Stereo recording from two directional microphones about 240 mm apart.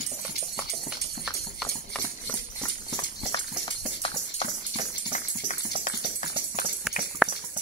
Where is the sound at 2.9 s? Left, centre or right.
Centre.